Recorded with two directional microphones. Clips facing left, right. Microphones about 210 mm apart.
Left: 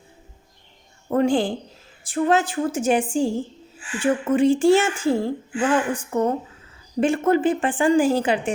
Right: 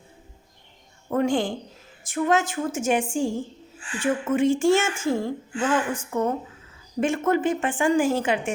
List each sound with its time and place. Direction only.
1.1 s a woman's voice: 35° left (ahead or behind)